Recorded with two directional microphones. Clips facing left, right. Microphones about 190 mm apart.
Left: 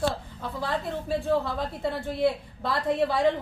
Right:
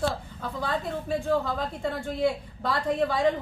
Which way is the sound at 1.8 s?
5° left (ahead or behind).